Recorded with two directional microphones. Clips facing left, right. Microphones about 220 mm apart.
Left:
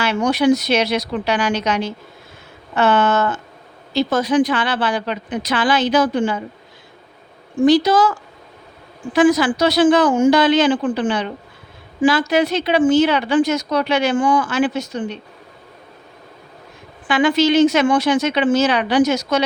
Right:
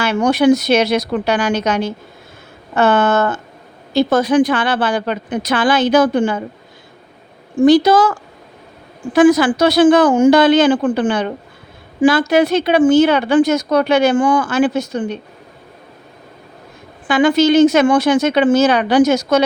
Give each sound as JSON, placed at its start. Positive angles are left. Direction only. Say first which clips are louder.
{"t": 0.0, "sound": "speech", "louder": "right 3 dB", "side_deg": -50}
{"t": 7.6, "sound": "speech", "louder": "right 3 dB", "side_deg": -50}
{"t": 9.1, "sound": "speech", "louder": "right 4 dB", "side_deg": -55}
{"t": 17.1, "sound": "speech", "louder": "right 3 dB", "side_deg": -45}